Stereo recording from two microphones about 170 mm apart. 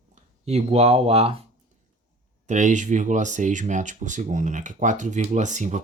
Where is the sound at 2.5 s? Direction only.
45° right (ahead or behind).